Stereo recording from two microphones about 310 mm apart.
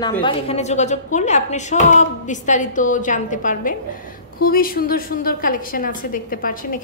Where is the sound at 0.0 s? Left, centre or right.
Centre.